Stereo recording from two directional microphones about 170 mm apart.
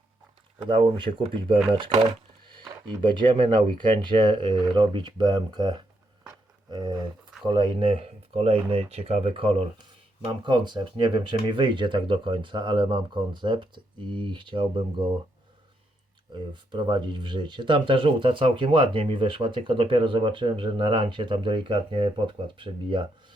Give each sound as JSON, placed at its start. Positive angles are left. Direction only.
{"t": 0.6, "sound": "speech", "side_deg": -30}
{"t": 6.2, "sound": "a sound", "side_deg": -25}
{"t": 7.4, "sound": "speech", "side_deg": -30}
{"t": 16.5, "sound": "speech", "side_deg": -25}